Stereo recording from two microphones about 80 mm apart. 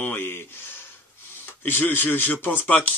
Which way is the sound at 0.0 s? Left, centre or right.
Left.